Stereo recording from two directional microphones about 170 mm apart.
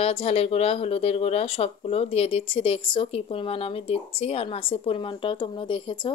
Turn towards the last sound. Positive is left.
turn(degrees=30)  # may be behind; listen again after turning